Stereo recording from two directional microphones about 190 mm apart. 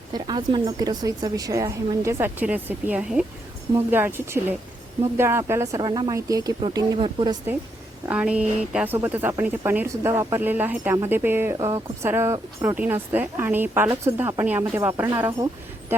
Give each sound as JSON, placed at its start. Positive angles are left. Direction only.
{"t": 0.1, "sound": "speech", "side_deg": -25}
{"t": 8.0, "sound": "speech", "side_deg": -5}